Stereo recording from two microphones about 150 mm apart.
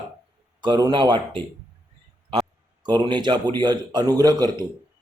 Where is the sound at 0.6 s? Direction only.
30° right (ahead or behind).